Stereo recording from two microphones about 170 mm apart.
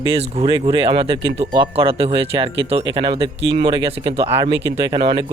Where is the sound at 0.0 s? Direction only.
35° right (ahead or behind).